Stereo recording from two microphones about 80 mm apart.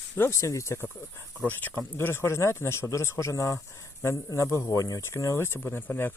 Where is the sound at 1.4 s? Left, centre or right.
Left.